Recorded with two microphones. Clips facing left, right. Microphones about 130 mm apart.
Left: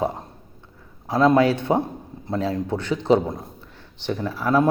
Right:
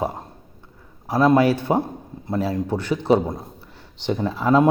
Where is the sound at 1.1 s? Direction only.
5° right (ahead or behind).